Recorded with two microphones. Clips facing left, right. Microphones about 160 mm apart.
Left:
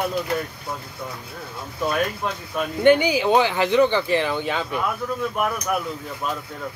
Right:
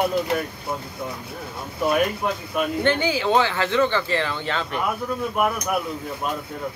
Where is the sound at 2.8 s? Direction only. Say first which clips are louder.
Left 8 dB; 15° left (ahead or behind).